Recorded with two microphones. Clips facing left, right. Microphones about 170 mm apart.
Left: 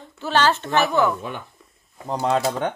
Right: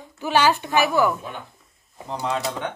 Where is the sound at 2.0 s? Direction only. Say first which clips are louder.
Left 5 dB; 45° left (ahead or behind).